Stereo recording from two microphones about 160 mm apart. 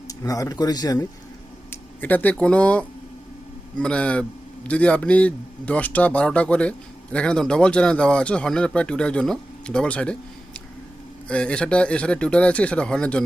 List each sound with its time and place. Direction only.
0.1 s speech: 20° left (ahead or behind)
1.7 s a man's voice: 10° left (ahead or behind)